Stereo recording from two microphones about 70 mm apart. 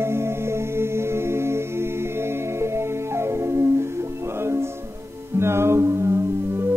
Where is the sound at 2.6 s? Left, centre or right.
Right.